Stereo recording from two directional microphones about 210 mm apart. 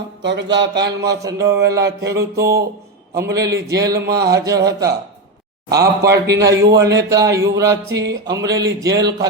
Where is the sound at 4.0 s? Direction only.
50° right (ahead or behind).